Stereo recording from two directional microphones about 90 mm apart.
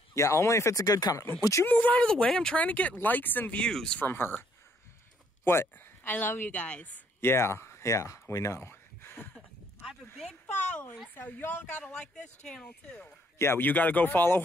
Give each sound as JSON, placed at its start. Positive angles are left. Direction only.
{"t": 0.1, "sound": "speech", "side_deg": 30}
{"t": 1.4, "sound": "speech", "side_deg": 35}
{"t": 1.7, "sound": "speech", "side_deg": 15}
{"t": 4.0, "sound": "speech", "side_deg": 25}
{"t": 5.4, "sound": "speech", "side_deg": 25}
{"t": 10.4, "sound": "speech", "side_deg": 15}
{"t": 12.4, "sound": "speech", "side_deg": 5}
{"t": 13.4, "sound": "speech", "side_deg": 25}